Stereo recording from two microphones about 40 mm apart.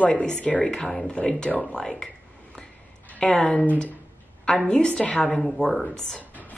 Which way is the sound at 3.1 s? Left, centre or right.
Left.